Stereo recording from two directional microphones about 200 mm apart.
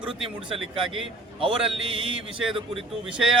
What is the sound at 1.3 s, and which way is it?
A man's voice, 25° right (ahead or behind).